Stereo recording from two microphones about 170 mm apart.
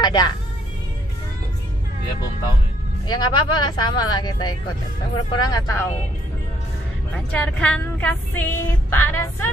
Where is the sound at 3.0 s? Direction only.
25° left (ahead or behind).